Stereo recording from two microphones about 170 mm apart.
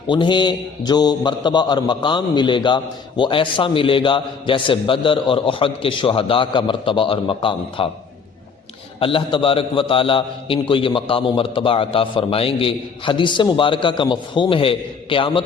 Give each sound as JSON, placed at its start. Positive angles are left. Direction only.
{"t": 0.1, "sound": "a man's voice", "side_deg": 25}
{"t": 9.0, "sound": "a man's voice", "side_deg": 30}